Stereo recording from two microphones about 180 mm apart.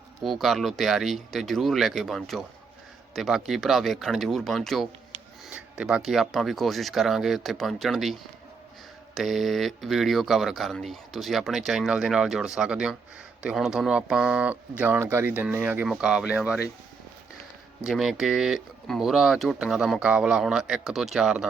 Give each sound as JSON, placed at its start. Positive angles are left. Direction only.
{"t": 0.2, "sound": "speech", "side_deg": 0}
{"t": 17.8, "sound": "speech", "side_deg": 0}